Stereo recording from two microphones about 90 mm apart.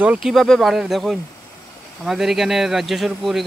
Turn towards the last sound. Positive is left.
turn(degrees=0)  # may be behind; listen again after turning